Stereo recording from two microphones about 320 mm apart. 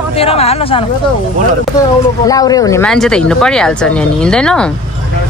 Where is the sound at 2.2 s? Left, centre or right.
Centre.